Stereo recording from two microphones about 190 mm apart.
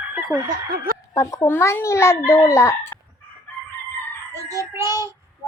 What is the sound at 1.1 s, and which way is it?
A child's voice, 15° left (ahead or behind).